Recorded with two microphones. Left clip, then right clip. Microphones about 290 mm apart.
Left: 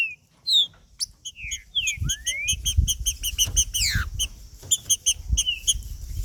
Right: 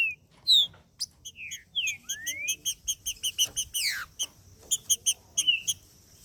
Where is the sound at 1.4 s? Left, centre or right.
Centre.